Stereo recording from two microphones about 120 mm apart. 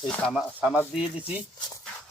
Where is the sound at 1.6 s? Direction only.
35° left (ahead or behind).